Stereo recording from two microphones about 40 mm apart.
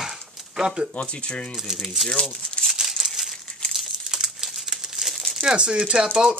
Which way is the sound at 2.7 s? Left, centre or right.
Centre.